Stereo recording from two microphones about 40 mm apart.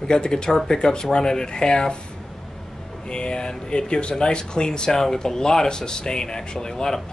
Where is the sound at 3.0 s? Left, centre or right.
Left.